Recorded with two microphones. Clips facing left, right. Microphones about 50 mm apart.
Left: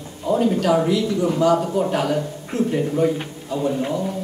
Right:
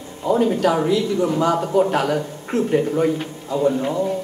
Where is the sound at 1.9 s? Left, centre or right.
Right.